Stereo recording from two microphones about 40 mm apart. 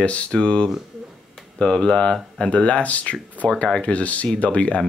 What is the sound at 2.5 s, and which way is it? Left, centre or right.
Speech, left.